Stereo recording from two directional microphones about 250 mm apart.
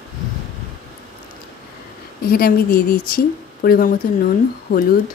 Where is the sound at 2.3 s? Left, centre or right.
Left.